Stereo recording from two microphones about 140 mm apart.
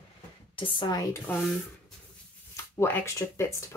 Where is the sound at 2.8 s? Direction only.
15° left (ahead or behind).